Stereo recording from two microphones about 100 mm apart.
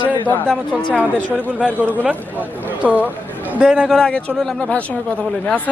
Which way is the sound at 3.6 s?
5° right (ahead or behind).